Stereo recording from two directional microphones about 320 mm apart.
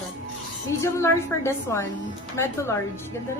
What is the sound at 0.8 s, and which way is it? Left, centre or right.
A woman's voice, centre.